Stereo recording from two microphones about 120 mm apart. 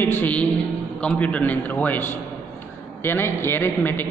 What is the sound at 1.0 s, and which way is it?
A man's voice, 10° left (ahead or behind).